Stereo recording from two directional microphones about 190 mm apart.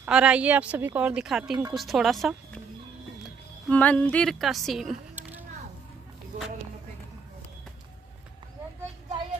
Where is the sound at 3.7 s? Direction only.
5° left (ahead or behind); by 5.5 s 10° right (ahead or behind).